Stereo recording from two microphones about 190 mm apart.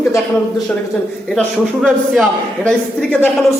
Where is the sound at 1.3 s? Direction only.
5° right (ahead or behind).